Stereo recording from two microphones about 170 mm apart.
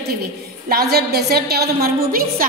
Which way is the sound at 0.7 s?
65° right (ahead or behind).